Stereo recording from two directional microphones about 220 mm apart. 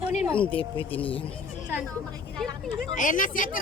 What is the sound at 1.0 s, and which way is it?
Speech, 25° left (ahead or behind).